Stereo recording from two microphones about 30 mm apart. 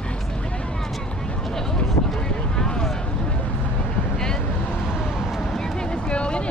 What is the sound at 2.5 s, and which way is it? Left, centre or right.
Vehicle, left.